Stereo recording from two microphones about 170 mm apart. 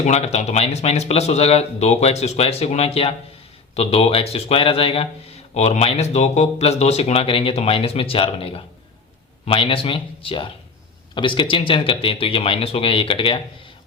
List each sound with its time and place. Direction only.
0.0 s speech: 40° left (ahead or behind)